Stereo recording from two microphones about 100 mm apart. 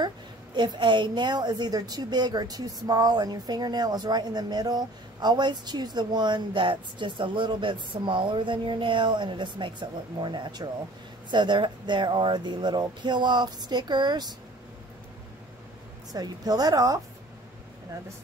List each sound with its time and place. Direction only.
0.6 s a woman's voice: 50° right (ahead or behind)
16.1 s a woman's voice: 40° right (ahead or behind)